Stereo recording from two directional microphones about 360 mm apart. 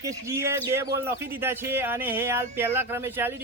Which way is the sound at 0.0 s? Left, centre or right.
Centre.